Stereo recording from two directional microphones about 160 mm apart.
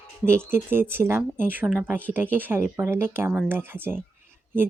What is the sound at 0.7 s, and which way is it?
Speech, 15° right (ahead or behind).